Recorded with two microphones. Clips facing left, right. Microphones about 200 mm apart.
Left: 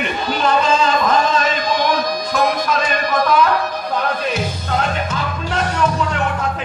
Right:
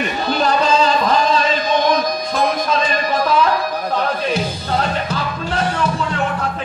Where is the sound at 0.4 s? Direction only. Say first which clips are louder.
Even; 35° right (ahead or behind).